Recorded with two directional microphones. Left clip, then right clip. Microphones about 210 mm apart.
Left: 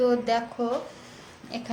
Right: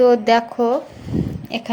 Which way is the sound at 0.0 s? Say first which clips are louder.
Right 10 dB; 35° right (ahead or behind).